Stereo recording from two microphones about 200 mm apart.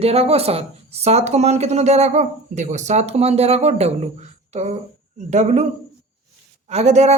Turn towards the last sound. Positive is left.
turn(degrees=-35)  # may be behind; listen again after turning